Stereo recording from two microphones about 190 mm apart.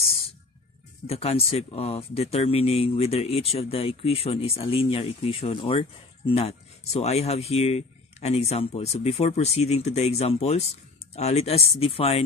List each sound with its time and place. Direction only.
0.0 s music: 30° left (ahead or behind)
1.0 s speech: 30° left (ahead or behind)